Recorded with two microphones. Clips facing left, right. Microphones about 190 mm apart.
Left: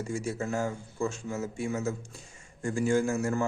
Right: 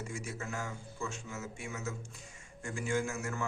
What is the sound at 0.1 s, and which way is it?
A man's voice, 35° left (ahead or behind).